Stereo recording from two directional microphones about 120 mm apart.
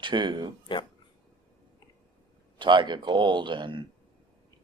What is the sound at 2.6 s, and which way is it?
Speech, 40° right (ahead or behind).